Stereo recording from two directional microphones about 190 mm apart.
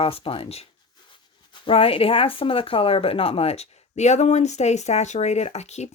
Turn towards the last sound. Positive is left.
turn(degrees=35)  # may be behind; listen again after turning